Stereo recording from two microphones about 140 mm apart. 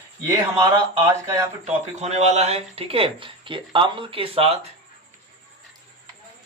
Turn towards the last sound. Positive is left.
turn(degrees=-40)  # may be behind; listen again after turning